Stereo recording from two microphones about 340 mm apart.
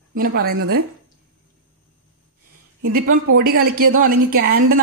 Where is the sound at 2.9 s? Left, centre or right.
Right.